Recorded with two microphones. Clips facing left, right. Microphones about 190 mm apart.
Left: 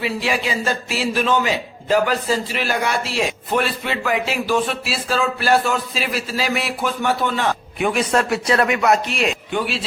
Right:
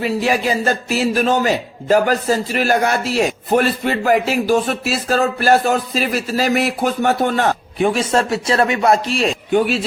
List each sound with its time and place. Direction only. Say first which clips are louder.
0.0 s a man's voice: right 5 dB; 45° right (ahead or behind)
7.8 s speech: right 2 dB; 30° right (ahead or behind)